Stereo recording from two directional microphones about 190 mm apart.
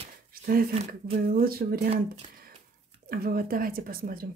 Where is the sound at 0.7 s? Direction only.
35° right (ahead or behind).